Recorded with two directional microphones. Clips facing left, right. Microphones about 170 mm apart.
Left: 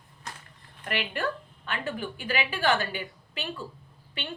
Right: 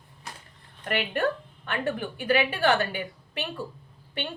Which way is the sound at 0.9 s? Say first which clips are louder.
Right 4 dB; 55° right (ahead or behind).